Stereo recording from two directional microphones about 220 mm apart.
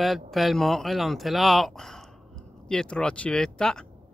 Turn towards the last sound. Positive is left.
turn(degrees=5)  # may be behind; listen again after turning